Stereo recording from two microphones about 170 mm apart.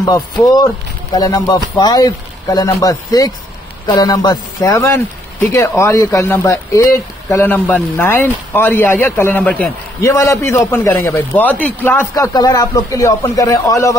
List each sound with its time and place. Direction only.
0.1 s a man's voice: 20° left (ahead or behind)